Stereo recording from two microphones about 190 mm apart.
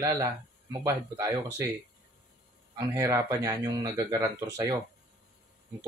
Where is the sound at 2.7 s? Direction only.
15° right (ahead or behind).